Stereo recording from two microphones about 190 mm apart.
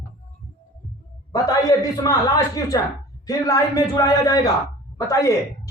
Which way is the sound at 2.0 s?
20° left (ahead or behind).